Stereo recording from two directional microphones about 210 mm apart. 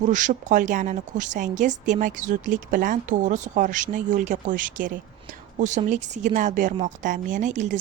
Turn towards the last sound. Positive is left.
turn(degrees=-35)  # may be behind; listen again after turning